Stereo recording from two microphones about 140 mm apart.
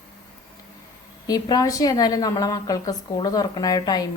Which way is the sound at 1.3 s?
25° left (ahead or behind).